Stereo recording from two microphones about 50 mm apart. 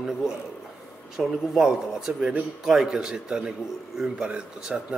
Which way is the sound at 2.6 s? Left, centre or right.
Centre.